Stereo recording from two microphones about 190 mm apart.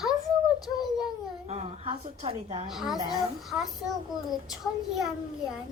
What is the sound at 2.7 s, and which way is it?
A child's voice, centre (ahead or behind).